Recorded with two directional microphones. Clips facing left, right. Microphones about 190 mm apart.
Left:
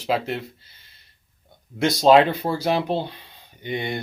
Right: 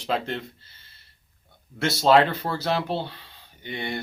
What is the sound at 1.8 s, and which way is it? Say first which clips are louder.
Speech: left 4 dB; 15° left (ahead or behind).